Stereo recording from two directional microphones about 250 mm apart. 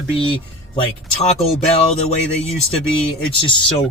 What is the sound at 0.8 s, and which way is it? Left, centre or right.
Speech, left.